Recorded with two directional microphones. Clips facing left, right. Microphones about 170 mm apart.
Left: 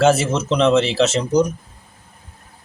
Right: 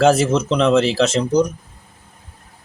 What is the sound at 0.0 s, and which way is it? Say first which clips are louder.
Speech: right 2 dB; 5° left (ahead or behind).